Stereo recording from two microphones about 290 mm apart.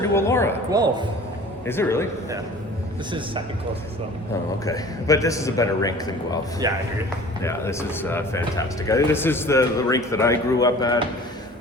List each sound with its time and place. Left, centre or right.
0.0 s speech: centre
0.7 s a man's voice: centre
1.6 s speech: centre
3.1 s a man's voice: centre
4.6 s speech: centre
6.6 s a man's voice: centre
7.4 s speech: centre